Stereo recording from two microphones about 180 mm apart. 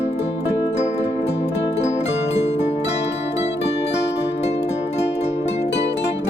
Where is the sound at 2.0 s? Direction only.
75° left (ahead or behind).